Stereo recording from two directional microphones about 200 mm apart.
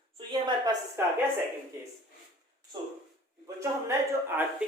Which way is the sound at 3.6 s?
10° right (ahead or behind).